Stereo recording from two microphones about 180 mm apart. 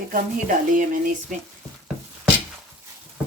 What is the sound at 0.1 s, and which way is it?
Speech, 45° right (ahead or behind).